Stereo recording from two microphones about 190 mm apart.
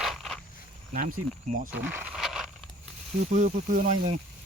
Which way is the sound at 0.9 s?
45° right (ahead or behind).